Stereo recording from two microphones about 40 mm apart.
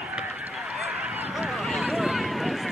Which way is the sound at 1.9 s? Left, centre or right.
Centre.